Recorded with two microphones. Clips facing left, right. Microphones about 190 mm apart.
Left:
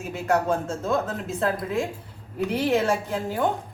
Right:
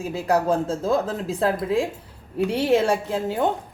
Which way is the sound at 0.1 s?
35° right (ahead or behind).